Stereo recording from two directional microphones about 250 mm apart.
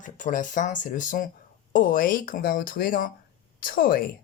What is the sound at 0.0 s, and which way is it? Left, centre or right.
Speech, left.